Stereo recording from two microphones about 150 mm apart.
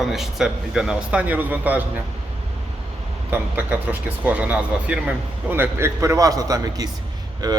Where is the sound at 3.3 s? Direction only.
10° right (ahead or behind).